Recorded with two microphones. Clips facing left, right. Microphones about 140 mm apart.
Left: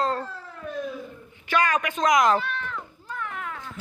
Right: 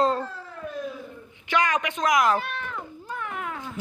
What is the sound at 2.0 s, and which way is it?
Cat, 5° right (ahead or behind).